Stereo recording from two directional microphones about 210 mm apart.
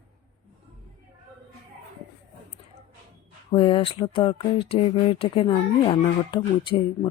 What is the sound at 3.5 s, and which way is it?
Speech, 25° left (ahead or behind).